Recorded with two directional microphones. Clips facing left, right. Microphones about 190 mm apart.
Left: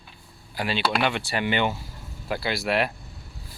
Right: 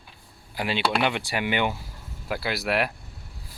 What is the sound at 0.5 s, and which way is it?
Speech, 15° right (ahead or behind).